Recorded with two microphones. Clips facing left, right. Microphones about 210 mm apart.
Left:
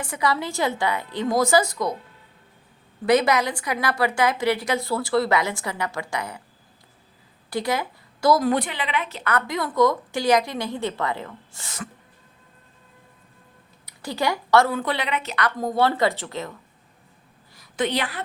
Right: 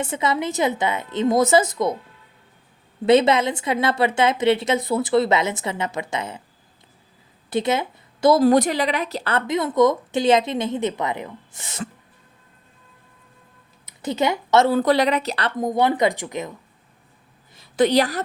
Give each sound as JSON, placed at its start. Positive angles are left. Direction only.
{"t": 0.0, "sound": "a woman's voice", "side_deg": -25}
{"t": 3.1, "sound": "a woman's voice", "side_deg": -25}
{"t": 7.5, "sound": "speech", "side_deg": -25}
{"t": 8.4, "sound": "a woman's voice", "side_deg": -40}
{"t": 13.8, "sound": "a woman's voice", "side_deg": -20}
{"t": 14.7, "sound": "a woman's voice", "side_deg": -40}
{"t": 17.7, "sound": "a woman's voice", "side_deg": -40}